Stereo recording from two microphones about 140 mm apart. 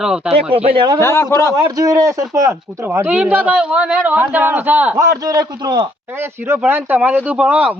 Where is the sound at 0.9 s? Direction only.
20° left (ahead or behind).